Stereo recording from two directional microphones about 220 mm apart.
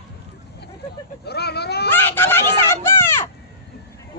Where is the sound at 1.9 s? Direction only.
10° left (ahead or behind).